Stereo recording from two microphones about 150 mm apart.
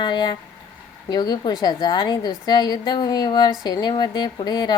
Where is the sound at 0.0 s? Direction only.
30° left (ahead or behind).